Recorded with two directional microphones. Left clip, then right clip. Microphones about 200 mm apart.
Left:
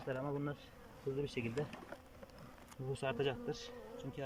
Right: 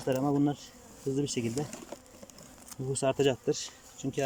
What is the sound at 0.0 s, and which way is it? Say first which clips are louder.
Speech: right 12 dB; 35° right (ahead or behind).